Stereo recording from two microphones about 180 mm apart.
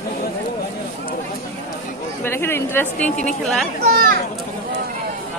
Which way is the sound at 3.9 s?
55° right (ahead or behind).